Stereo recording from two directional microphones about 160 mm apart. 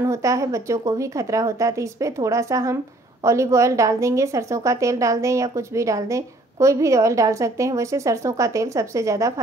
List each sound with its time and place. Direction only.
0.0 s a woman's voice: 20° right (ahead or behind)